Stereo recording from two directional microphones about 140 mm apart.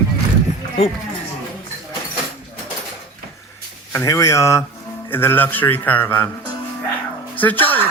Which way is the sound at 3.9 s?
20° left (ahead or behind).